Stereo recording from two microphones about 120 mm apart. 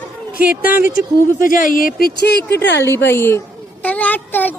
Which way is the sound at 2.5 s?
20° left (ahead or behind).